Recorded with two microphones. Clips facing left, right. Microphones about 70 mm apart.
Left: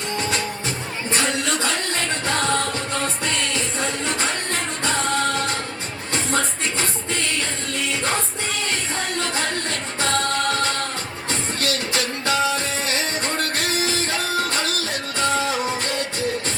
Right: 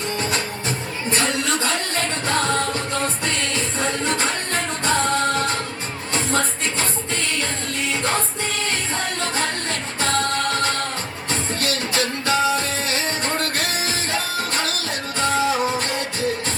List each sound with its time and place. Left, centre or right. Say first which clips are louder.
0.2 s music: even; right
1.2 s a sound: even; right
2.2 s music: right 1 dB; right
9.2 s music: right 1 dB; right